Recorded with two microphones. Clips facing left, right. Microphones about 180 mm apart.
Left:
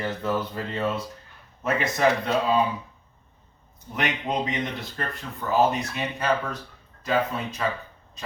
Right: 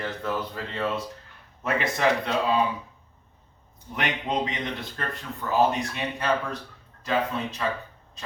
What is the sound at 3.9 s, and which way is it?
Speech, centre (ahead or behind).